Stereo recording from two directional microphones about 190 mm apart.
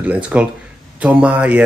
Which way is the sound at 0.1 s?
5° right (ahead or behind).